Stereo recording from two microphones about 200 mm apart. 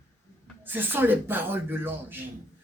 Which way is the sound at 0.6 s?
10° right (ahead or behind).